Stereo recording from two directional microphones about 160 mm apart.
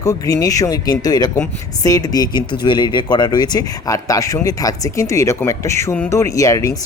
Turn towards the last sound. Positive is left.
turn(degrees=20)  # may be behind; listen again after turning